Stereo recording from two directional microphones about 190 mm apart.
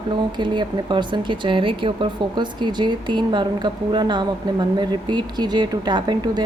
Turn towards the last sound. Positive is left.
turn(degrees=-25)  # may be behind; listen again after turning